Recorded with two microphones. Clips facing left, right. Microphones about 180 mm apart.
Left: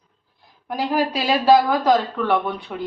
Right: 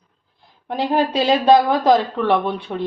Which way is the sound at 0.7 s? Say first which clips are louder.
Right 3 dB; 25° right (ahead or behind).